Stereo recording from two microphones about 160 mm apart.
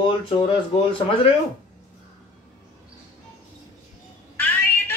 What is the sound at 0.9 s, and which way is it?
Speech, 35° left (ahead or behind).